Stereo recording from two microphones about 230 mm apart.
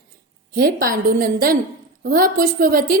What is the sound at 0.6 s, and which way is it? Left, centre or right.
A woman's voice, right.